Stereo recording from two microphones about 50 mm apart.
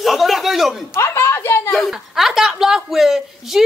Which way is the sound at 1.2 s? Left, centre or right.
Left.